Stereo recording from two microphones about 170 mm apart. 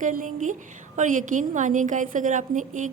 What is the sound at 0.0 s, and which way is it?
A woman's voice, 50° right (ahead or behind).